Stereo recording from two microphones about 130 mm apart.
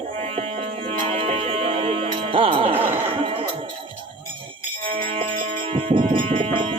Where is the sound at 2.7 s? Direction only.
15° right (ahead or behind).